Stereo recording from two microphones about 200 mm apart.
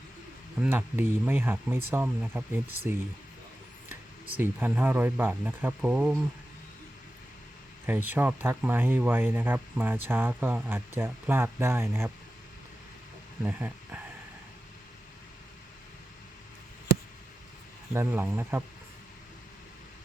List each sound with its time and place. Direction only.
0.6 s speech: 10° right (ahead or behind)
4.3 s speech: 10° right (ahead or behind)
7.9 s speech: 10° right (ahead or behind)
13.4 s speech: 10° right (ahead or behind)
17.9 s speech: 10° right (ahead or behind)